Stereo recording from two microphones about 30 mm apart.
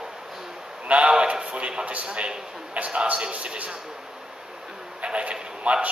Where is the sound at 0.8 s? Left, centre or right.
Right.